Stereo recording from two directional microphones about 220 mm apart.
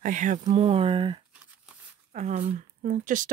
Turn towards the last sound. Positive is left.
turn(degrees=-35)  # may be behind; listen again after turning